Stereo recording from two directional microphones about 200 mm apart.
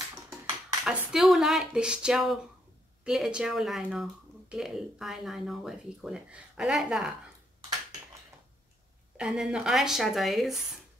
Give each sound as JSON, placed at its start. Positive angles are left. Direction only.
{"t": 0.8, "sound": "speech", "side_deg": 0}
{"t": 9.1, "sound": "speech", "side_deg": -5}